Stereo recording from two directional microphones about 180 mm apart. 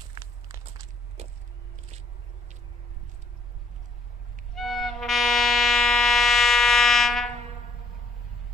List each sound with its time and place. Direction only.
0.1 s walk: 20° right (ahead or behind)
1.2 s vehicle: 35° right (ahead or behind)
4.6 s music: centre (ahead or behind)